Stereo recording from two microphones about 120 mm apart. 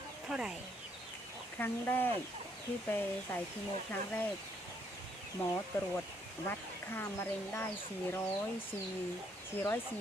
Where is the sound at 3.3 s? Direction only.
15° left (ahead or behind).